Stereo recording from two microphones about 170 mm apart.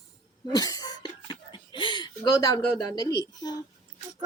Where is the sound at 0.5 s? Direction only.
20° left (ahead or behind).